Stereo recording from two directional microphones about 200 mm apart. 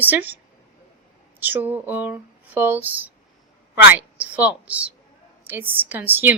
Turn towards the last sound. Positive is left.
turn(degrees=-10)  # may be behind; listen again after turning